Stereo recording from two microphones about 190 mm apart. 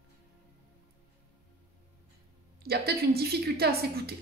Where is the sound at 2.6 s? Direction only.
55° right (ahead or behind).